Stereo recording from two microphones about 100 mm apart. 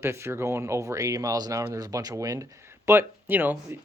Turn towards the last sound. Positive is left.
turn(degrees=-20)  # may be behind; listen again after turning